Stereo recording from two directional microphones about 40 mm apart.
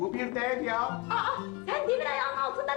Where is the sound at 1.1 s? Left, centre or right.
Centre.